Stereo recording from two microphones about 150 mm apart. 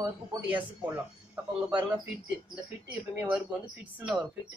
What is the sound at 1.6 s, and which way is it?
Speech, 30° right (ahead or behind).